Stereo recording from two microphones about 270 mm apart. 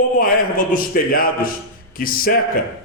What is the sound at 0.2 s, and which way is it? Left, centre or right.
A man's voice, left.